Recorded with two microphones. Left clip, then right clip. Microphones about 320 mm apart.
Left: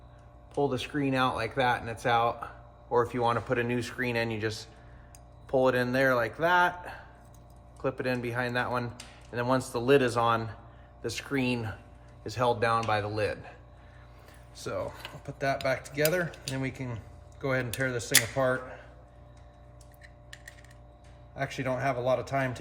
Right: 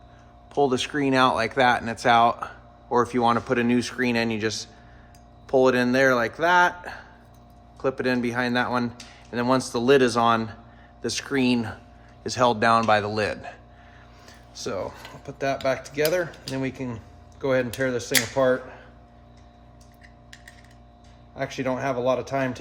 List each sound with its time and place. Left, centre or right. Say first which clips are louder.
0.5 s speech: right 7 dB; right
21.3 s speech: right 4 dB; right